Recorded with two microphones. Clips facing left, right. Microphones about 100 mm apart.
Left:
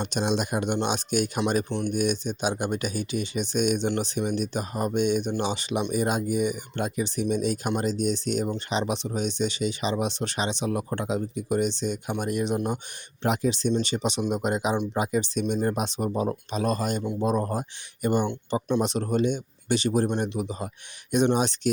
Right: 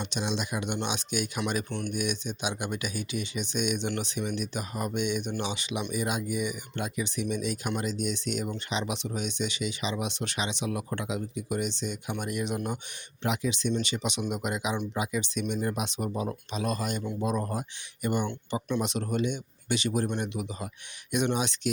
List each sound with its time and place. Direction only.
0.0 s speech: 50° left (ahead or behind); by 12.8 s 30° left (ahead or behind)
13.2 s speech: 40° left (ahead or behind)
17.0 s speech: 20° left (ahead or behind)
17.2 s speech: 35° left (ahead or behind)